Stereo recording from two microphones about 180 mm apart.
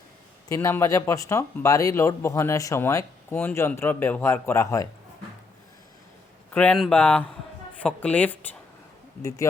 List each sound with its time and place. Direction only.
0.4 s speech: 15° left (ahead or behind)
6.5 s speech: 5° left (ahead or behind)